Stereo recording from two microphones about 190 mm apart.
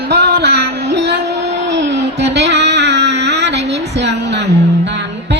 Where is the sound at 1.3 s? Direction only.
65° right (ahead or behind).